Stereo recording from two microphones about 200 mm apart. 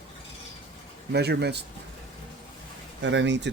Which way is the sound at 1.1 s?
55° right (ahead or behind).